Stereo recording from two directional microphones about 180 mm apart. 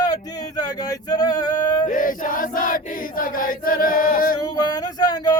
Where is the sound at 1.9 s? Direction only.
50° left (ahead or behind).